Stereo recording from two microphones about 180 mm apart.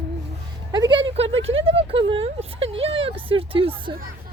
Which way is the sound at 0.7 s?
25° right (ahead or behind).